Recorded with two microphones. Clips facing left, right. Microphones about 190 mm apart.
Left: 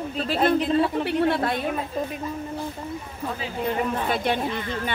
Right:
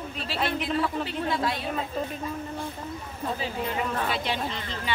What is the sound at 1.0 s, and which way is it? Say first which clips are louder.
Speech: left 6 dB; 65° left (ahead or behind).